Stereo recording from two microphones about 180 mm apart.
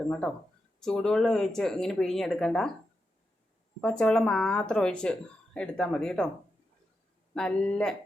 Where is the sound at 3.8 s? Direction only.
5° left (ahead or behind).